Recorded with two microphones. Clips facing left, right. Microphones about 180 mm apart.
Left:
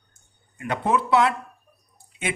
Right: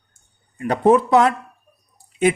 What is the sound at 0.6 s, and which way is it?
Speech, 35° right (ahead or behind).